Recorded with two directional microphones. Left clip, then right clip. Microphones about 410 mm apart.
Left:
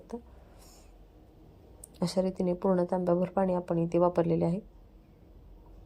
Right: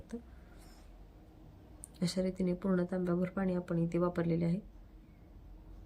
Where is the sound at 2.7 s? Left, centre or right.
Left.